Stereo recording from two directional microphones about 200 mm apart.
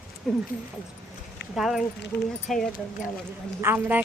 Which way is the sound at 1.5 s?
Centre (ahead or behind).